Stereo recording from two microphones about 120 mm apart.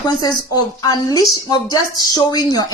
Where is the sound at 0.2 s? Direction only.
30° left (ahead or behind).